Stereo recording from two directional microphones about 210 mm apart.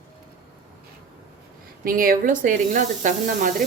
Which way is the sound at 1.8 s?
40° right (ahead or behind).